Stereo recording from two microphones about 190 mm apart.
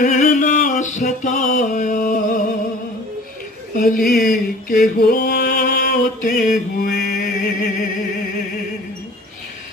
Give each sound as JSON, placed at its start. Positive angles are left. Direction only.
{"t": 0.0, "sound": "music", "side_deg": 40}
{"t": 3.7, "sound": "a sound", "side_deg": 45}
{"t": 6.8, "sound": "mantra", "side_deg": 45}